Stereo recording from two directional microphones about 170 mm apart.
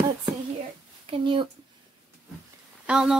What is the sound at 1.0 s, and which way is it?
Speech, 30° right (ahead or behind).